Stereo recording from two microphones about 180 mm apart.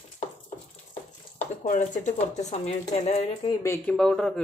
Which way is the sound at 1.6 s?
45° left (ahead or behind).